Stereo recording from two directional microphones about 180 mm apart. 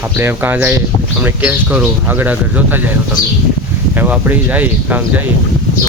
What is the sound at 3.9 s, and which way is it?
Speech, 10° right (ahead or behind).